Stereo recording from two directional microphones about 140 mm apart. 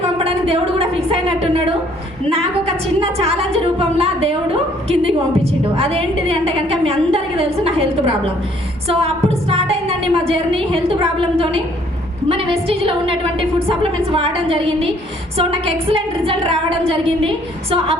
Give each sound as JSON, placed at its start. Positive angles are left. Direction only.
{"t": 0.4, "sound": "a woman's voice", "side_deg": -45}
{"t": 3.0, "sound": "a woman's voice", "side_deg": -45}
{"t": 8.9, "sound": "a woman's voice", "side_deg": -45}